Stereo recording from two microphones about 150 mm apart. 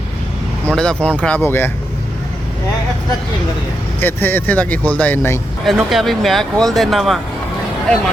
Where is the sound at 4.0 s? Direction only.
15° left (ahead or behind).